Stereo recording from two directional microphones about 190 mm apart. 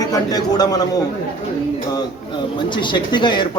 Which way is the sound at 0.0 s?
20° left (ahead or behind).